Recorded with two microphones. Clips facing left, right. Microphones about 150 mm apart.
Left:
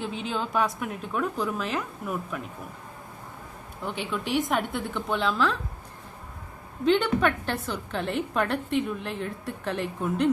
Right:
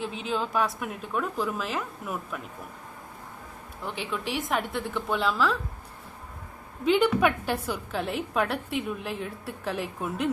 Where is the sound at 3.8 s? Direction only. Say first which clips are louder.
Left 2 dB; centre (ahead or behind).